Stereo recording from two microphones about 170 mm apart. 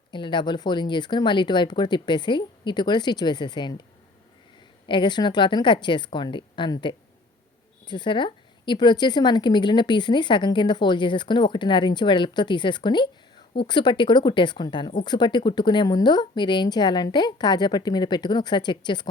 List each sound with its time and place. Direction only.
0.1 s a woman's voice: 25° left (ahead or behind)
4.9 s a woman's voice: 25° left (ahead or behind)